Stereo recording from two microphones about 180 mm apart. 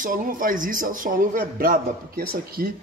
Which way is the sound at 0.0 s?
50° right (ahead or behind).